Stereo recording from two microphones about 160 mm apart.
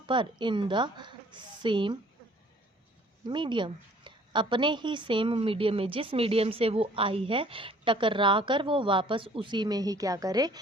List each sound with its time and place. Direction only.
0.0 s a woman's voice: 30° right (ahead or behind)
3.2 s a woman's voice: 30° right (ahead or behind)